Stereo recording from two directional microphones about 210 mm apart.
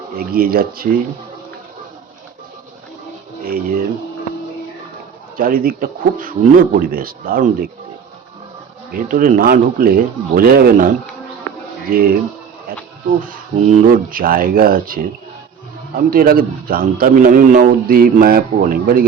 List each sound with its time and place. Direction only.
0.2 s a man's voice: 45° right (ahead or behind)
3.4 s speech: 45° right (ahead or behind)
5.4 s a man's voice: 45° right (ahead or behind)
8.9 s a man's voice: 40° right (ahead or behind)
13.2 s a man's voice: 40° right (ahead or behind)
16.0 s a man's voice: 45° right (ahead or behind)